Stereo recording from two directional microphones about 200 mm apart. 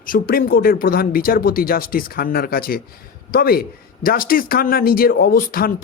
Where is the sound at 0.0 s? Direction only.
45° left (ahead or behind).